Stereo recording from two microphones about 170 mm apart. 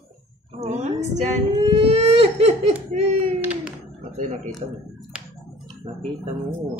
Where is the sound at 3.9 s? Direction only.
45° right (ahead or behind).